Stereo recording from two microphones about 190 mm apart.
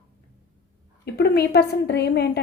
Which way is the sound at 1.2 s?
60° left (ahead or behind).